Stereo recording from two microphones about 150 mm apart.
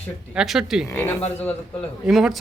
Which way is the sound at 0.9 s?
10° left (ahead or behind).